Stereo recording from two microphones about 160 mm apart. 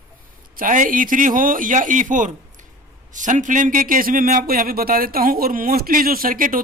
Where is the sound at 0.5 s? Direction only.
55° right (ahead or behind).